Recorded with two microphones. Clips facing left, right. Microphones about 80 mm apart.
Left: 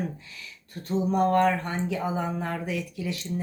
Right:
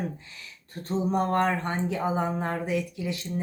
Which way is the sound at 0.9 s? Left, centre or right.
Right.